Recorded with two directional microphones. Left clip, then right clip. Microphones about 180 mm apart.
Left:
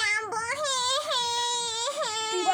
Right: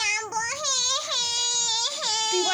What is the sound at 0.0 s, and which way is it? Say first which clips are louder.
Baby cry: right 1 dB; 40° left (ahead or behind).